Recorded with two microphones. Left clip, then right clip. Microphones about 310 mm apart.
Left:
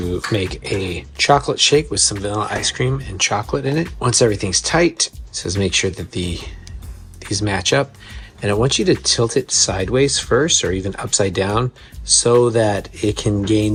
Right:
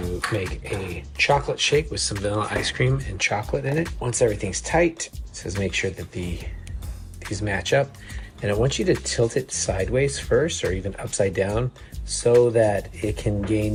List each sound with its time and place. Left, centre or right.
0.3 s speech: centre
12.3 s speech: left
13.0 s speech: centre